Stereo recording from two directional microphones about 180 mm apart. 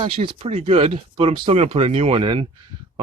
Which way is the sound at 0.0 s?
30° right (ahead or behind).